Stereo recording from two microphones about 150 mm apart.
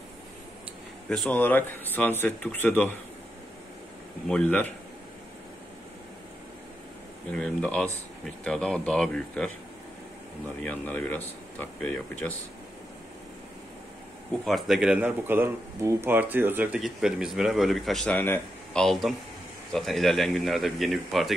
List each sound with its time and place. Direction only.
1.0 s speech: 5° left (ahead or behind)
4.3 s speech: 10° left (ahead or behind)
7.2 s speech: 5° left (ahead or behind)
10.6 s speech: 10° left (ahead or behind)
14.4 s speech: centre (ahead or behind)
16.8 s speech: centre (ahead or behind)